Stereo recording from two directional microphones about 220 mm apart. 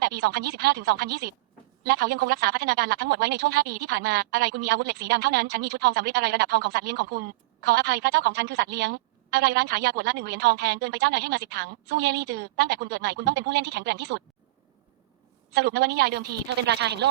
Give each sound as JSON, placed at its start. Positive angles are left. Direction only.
{"t": 0.0, "sound": "a woman's voice", "side_deg": -45}
{"t": 15.4, "sound": "a woman's voice", "side_deg": -45}